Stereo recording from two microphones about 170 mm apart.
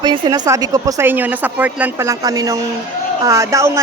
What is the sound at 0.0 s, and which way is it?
Speech, 25° right (ahead or behind).